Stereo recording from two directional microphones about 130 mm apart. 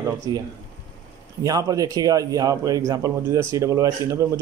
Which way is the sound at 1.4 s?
30° right (ahead or behind).